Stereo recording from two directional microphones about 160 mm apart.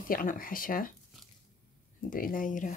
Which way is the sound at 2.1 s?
60° left (ahead or behind).